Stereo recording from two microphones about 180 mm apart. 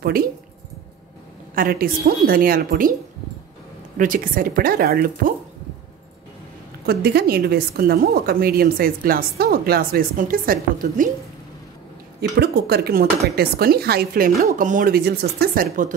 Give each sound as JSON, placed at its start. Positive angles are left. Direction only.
{"t": 0.0, "sound": "a woman's voice", "side_deg": -55}
{"t": 1.5, "sound": "a woman's voice", "side_deg": -55}
{"t": 4.0, "sound": "speech", "side_deg": -50}
{"t": 6.9, "sound": "a woman's voice", "side_deg": -60}
{"t": 12.2, "sound": "a woman's voice", "side_deg": -65}